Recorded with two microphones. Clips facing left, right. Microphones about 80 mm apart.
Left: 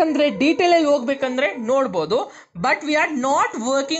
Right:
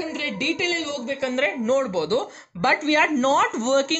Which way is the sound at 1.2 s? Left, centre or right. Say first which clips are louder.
Left 2 dB; left.